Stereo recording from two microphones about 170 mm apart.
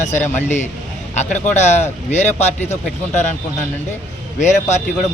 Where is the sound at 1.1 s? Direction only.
40° left (ahead or behind).